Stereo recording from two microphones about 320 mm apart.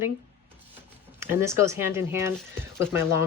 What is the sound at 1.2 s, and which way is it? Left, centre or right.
Speech, centre.